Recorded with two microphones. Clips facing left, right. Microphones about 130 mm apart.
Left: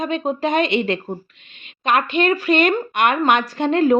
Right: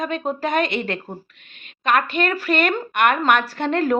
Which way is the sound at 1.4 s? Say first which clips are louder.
Left 2 dB; 50° right (ahead or behind).